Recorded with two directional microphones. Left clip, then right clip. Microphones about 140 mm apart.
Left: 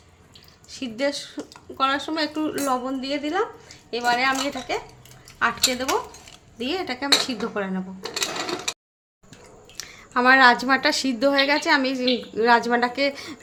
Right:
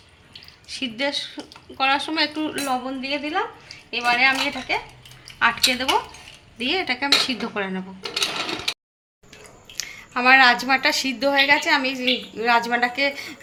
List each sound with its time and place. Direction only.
0.7 s speech: 40° left (ahead or behind)
2.8 s a woman's voice: 55° left (ahead or behind)
5.4 s speech: 35° left (ahead or behind)
9.7 s a woman's voice: 50° left (ahead or behind)